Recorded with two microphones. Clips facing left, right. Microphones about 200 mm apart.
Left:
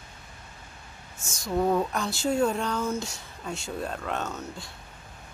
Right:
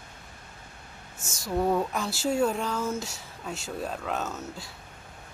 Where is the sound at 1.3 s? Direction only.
5° right (ahead or behind).